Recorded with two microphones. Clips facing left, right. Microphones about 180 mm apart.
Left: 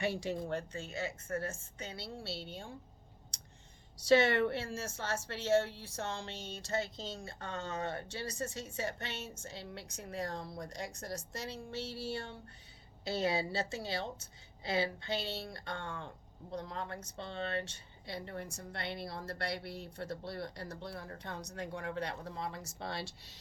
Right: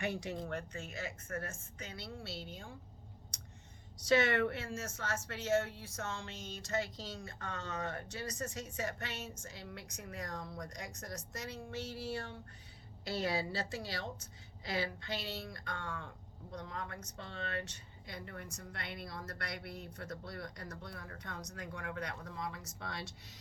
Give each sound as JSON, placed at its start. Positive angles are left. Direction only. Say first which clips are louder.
{"t": 0.0, "sound": "a woman's voice", "louder": "left 3 dB", "side_deg": 30}
{"t": 3.3, "sound": "a sound", "louder": "right 3 dB", "side_deg": 30}
{"t": 3.9, "sound": "a woman's voice", "louder": "left 3 dB", "side_deg": 30}